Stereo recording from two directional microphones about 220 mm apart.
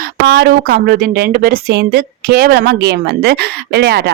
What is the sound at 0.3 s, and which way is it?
A woman's voice, 45° right (ahead or behind).